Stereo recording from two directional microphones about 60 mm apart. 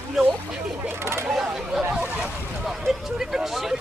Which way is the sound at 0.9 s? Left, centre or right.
Right.